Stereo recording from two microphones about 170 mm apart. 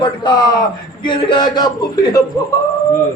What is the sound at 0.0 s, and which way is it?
A man's voice, 25° left (ahead or behind).